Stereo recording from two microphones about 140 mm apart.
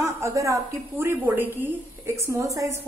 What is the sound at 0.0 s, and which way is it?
A woman's voice, 20° right (ahead or behind).